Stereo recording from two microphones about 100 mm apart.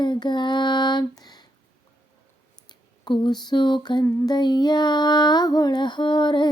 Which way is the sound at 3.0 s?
45° left (ahead or behind).